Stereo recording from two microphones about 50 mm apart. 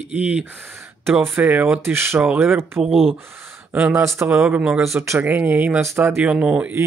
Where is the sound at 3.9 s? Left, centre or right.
Right.